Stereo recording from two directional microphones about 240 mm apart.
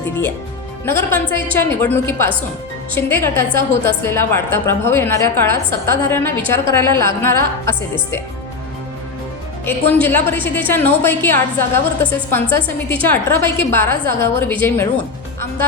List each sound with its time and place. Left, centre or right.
0.9 s a woman's voice: centre
9.6 s a woman's voice: centre